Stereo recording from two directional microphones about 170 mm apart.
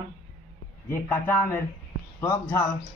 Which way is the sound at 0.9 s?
10° left (ahead or behind).